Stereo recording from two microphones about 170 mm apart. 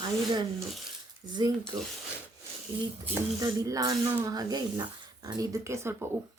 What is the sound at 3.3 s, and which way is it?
Speech, 20° right (ahead or behind).